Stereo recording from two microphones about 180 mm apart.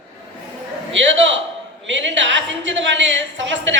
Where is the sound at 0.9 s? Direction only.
90° right.